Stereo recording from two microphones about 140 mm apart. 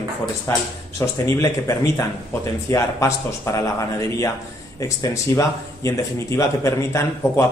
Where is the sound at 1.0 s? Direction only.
20° left (ahead or behind).